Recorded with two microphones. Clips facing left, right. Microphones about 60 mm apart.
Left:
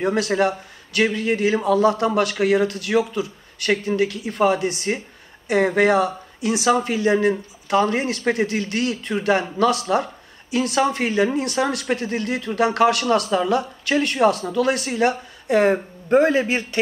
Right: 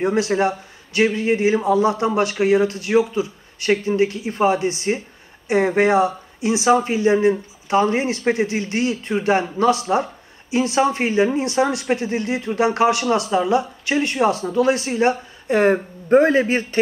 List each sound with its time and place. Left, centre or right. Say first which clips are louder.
0.0 s a man's voice: right 1 dB; right